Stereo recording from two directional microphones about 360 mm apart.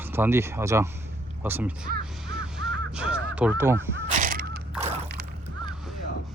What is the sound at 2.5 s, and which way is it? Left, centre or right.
Crow, centre.